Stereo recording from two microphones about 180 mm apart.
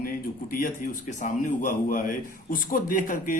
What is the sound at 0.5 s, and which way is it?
A man's voice, 50° left (ahead or behind).